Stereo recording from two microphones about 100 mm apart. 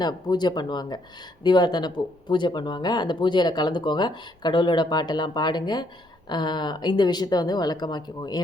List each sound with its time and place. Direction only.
0.0 s speech: 45° left (ahead or behind)